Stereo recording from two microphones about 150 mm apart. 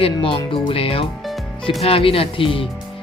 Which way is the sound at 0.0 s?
35° left (ahead or behind).